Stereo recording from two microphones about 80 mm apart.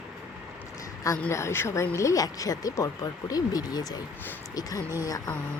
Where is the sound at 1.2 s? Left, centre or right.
Left.